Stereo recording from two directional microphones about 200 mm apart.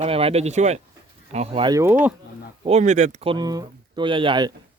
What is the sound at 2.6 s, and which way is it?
Speech, 35° right (ahead or behind).